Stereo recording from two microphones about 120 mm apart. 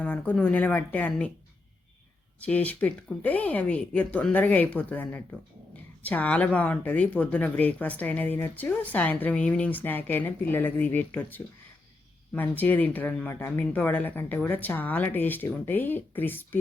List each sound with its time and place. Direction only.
0.0 s speech: 10° left (ahead or behind)
2.4 s speech: 10° left (ahead or behind)